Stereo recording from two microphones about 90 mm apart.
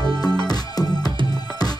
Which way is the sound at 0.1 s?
45° left (ahead or behind).